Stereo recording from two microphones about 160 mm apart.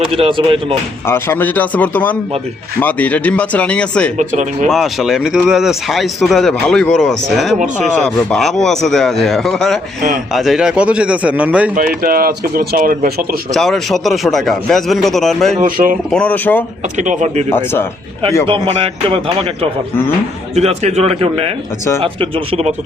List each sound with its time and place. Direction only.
0.1 s speech: 35° right (ahead or behind)
1.0 s speech: 15° left (ahead or behind)
4.2 s speech: 50° right (ahead or behind)
4.7 s a man's voice: centre (ahead or behind)
11.7 s speech: 65° right (ahead or behind)
13.5 s speech: centre (ahead or behind)
15.6 s speech: 60° right (ahead or behind)
16.1 s speech: 10° left (ahead or behind)
17.0 s speech: 50° right (ahead or behind)
18.4 s speech: 30° right (ahead or behind)
20.6 s speech: 40° right (ahead or behind)